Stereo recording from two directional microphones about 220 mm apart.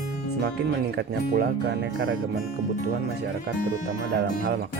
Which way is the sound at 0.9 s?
45° right (ahead or behind).